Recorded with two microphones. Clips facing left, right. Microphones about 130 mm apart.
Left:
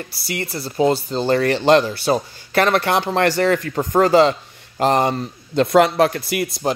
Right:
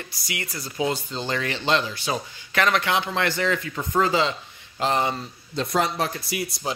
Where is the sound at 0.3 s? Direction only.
35° left (ahead or behind).